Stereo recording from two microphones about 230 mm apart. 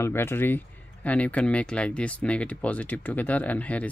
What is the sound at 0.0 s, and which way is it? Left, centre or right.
Speech, centre.